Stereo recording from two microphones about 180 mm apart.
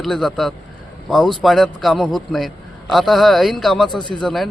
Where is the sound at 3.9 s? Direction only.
25° left (ahead or behind).